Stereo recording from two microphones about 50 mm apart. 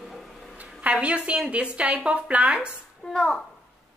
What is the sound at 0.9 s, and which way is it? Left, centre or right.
Speech, right.